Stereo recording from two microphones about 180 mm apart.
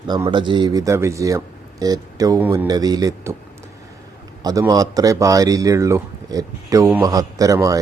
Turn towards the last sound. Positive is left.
turn(degrees=-20)  # may be behind; listen again after turning